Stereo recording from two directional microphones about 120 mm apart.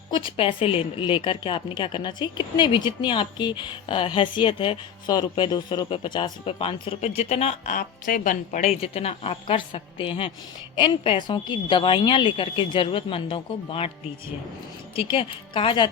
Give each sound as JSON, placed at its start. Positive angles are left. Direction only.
{"t": 0.1, "sound": "a woman's voice", "side_deg": 45}
{"t": 7.0, "sound": "speech", "side_deg": 60}
{"t": 8.2, "sound": "a woman's voice", "side_deg": 90}
{"t": 8.9, "sound": "a woman's voice", "side_deg": 55}
{"t": 14.9, "sound": "a woman's voice", "side_deg": 50}